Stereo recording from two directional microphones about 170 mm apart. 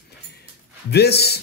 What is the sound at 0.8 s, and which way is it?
Speech, 70° left (ahead or behind).